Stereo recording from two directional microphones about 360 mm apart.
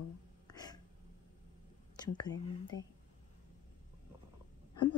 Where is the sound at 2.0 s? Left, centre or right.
Centre.